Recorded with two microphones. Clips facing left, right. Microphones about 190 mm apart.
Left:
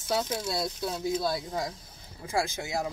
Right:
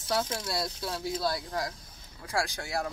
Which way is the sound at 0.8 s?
20° left (ahead or behind).